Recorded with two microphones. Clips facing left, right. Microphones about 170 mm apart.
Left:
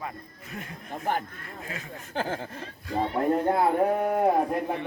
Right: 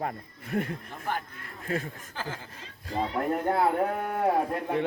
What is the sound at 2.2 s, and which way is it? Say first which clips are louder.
Speech: left 9 dB; 55° left (ahead or behind).